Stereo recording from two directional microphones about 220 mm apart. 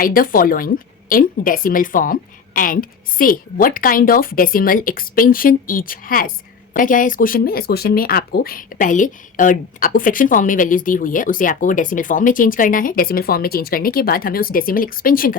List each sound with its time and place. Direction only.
0.0 s speech: 40° left (ahead or behind)